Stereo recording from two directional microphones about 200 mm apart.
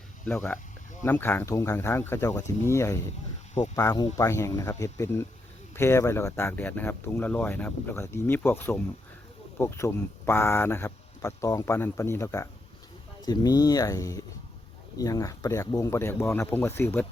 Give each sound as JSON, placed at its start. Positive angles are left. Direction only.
{"t": 0.3, "sound": "speech", "side_deg": 5}